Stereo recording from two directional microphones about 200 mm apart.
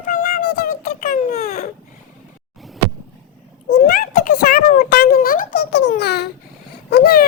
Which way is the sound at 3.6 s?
45° left (ahead or behind).